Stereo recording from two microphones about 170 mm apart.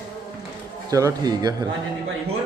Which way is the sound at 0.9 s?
20° right (ahead or behind).